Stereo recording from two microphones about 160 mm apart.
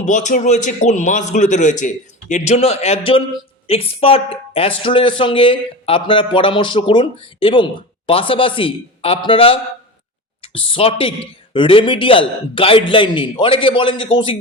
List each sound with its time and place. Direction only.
0.0 s a man's voice: 50° left (ahead or behind); by 14.3 s 30° left (ahead or behind)